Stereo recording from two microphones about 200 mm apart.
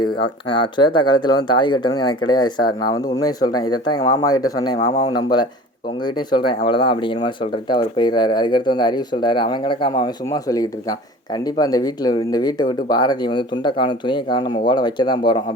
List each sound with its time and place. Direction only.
0.0 s speech: 25° left (ahead or behind)